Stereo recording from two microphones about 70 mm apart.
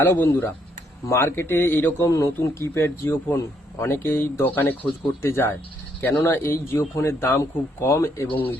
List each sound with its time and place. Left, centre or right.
0.0 s speech: left
2.0 s a man's voice: left
5.2 s speech: left